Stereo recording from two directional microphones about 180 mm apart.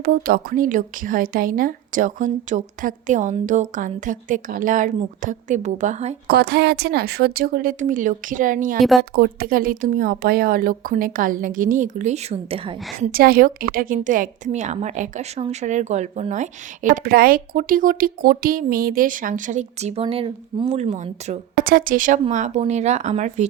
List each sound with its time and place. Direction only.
0.0 s a woman's voice: 55° right (ahead or behind)
6.2 s a woman's voice: 65° right (ahead or behind); by 13.1 s 30° right (ahead or behind)
13.1 s a woman's voice: 55° right (ahead or behind)